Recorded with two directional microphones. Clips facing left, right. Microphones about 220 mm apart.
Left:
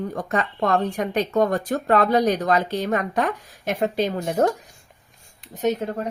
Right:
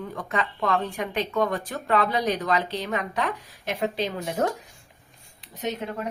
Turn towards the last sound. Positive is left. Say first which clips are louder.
# left 7 dB
turn(degrees=45)  # may be behind; listen again after turning